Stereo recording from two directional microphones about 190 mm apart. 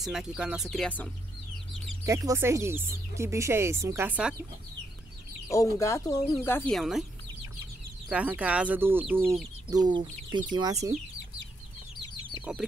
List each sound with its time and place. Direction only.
0.0 s speech: centre (ahead or behind)
2.0 s speech: 15° right (ahead or behind)
5.5 s speech: 15° left (ahead or behind)
6.7 s speech: centre (ahead or behind)
8.1 s speech: 5° right (ahead or behind)
9.2 s speech: centre (ahead or behind)
9.7 s speech: 20° right (ahead or behind)
12.5 s speech: 5° right (ahead or behind)